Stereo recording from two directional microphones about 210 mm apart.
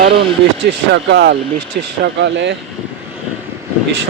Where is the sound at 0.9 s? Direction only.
55° right (ahead or behind).